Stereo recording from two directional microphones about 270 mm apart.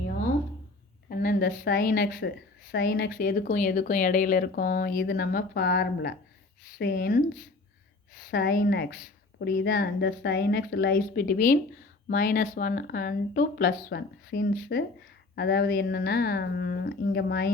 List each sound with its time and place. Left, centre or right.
1.1 s a woman's voice: left